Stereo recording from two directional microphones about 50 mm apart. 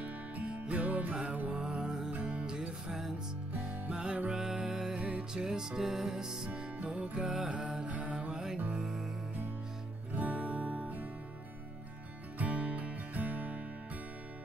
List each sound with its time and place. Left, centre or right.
0.5 s music: right
2.1 s music: right
2.4 s music: centre
4.9 s music: right
5.3 s music: centre
6.5 s music: right
7.2 s music: centre
10.1 s music: right
12.4 s music: right